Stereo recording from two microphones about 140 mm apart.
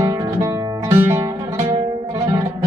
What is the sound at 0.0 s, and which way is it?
Music, 25° right (ahead or behind).